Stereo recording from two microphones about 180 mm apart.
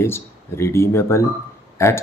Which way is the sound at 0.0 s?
15° left (ahead or behind).